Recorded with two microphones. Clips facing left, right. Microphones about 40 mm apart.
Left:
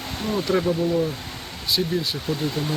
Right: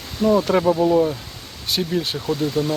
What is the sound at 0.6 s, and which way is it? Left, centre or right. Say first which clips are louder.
Speech: right 6 dB; right.